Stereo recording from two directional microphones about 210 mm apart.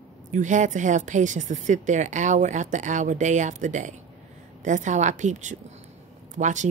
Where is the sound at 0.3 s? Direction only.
35° right (ahead or behind).